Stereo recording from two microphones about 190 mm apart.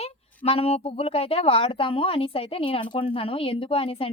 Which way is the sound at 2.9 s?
25° left (ahead or behind).